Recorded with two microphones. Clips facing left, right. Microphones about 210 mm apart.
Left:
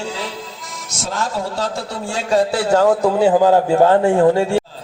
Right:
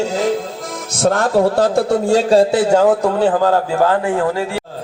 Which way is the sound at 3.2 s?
15° left (ahead or behind).